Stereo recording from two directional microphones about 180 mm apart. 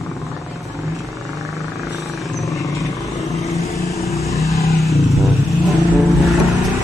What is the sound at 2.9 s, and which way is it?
Vehicle, 20° left (ahead or behind).